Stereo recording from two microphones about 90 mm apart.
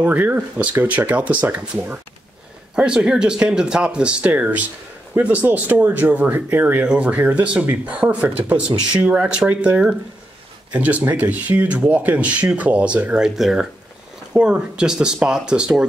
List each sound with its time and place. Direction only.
0.0 s speech: 20° right (ahead or behind)